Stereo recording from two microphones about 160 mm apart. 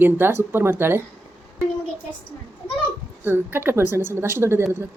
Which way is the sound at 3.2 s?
15° right (ahead or behind).